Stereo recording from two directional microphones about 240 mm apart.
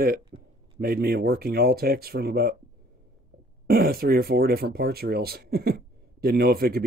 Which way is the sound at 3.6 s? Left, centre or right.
Right.